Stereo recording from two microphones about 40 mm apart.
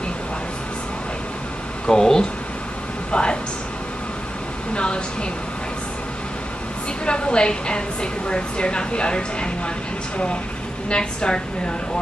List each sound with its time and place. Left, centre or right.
1.9 s speech: centre
3.1 s a sound: left
4.7 s speech: left
7.1 s a woman's voice: left
10.9 s a woman's voice: left